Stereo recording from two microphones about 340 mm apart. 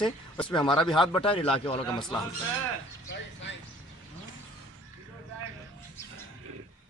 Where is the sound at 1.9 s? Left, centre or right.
Centre.